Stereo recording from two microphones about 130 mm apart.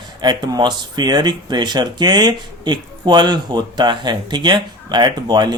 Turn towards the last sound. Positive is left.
turn(degrees=-35)  # may be behind; listen again after turning